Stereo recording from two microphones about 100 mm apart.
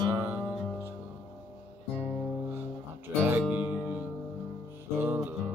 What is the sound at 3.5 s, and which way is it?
Music, 15° right (ahead or behind).